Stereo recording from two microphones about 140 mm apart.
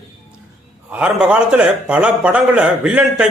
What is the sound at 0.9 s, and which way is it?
A man's voice, 10° right (ahead or behind).